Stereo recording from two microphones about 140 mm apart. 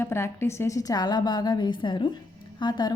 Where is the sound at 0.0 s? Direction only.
15° left (ahead or behind).